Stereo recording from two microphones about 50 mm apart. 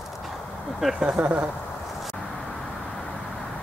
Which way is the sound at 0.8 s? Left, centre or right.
Centre.